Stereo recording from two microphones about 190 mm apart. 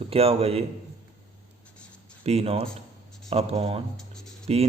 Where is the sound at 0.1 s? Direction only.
30° right (ahead or behind).